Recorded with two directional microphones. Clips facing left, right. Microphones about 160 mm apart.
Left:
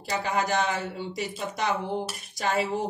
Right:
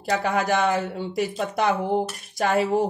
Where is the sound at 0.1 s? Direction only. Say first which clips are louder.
Right 4 dB; 55° right (ahead or behind).